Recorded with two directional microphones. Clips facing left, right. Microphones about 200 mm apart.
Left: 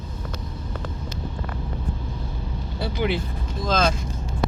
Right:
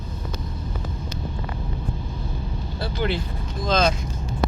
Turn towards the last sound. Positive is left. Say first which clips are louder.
# right 1 dB
turn(degrees=5)  # may be behind; listen again after turning